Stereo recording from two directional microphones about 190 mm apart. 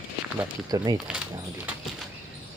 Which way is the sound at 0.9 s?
5° right (ahead or behind).